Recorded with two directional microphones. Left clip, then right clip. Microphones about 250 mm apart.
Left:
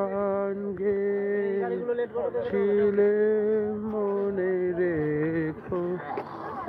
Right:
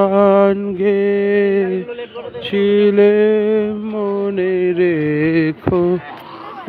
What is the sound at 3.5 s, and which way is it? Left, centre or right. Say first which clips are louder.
Music: right 9 dB; right.